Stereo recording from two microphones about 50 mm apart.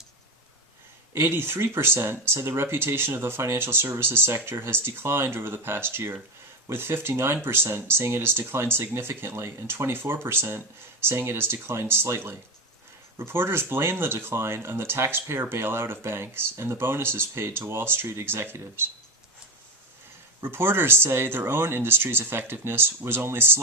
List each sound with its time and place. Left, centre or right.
1.1 s speech: right
20.4 s speech: right